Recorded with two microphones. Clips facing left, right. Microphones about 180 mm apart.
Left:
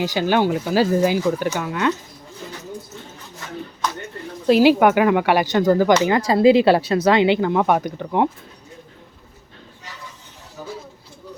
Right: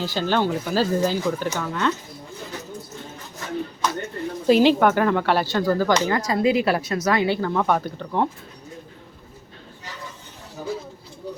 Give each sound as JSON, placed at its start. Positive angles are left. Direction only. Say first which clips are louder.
{"t": 0.0, "sound": "speech", "louder": "left 4 dB", "side_deg": 15}
{"t": 4.4, "sound": "speech", "louder": "left 2 dB", "side_deg": 5}